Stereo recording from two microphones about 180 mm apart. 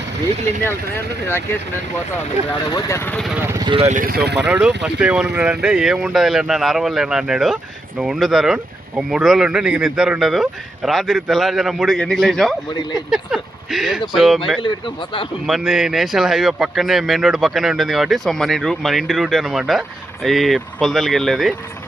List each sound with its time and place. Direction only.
2.6 s speech: 20° left (ahead or behind)
3.2 s speech: centre (ahead or behind)
3.4 s speech: 15° right (ahead or behind)
3.7 s speech: 30° right (ahead or behind)
3.9 s speech: 55° right (ahead or behind)
4.4 s speech: 5° right (ahead or behind)